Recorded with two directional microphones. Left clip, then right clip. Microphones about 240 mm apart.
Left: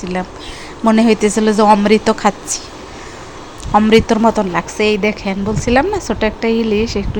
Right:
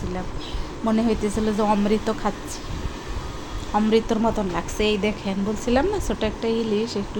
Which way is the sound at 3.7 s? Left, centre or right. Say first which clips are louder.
Left 10 dB; left.